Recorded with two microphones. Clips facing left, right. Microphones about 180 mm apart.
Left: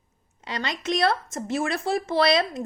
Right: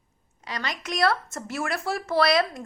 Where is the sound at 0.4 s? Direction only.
25° left (ahead or behind).